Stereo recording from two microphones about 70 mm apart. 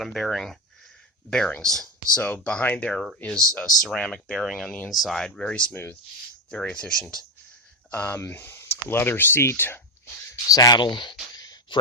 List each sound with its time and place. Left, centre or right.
0.0 s speech: centre
5.7 s speech: left
6.5 s speech: centre
7.9 s speech: left
8.2 s speech: left
10.4 s speech: left